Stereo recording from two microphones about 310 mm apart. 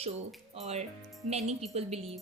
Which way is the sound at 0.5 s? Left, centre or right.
Right.